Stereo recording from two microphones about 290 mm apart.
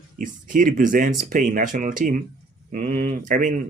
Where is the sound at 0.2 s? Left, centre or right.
Right.